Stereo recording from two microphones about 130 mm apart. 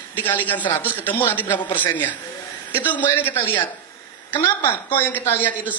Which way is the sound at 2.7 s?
15° left (ahead or behind).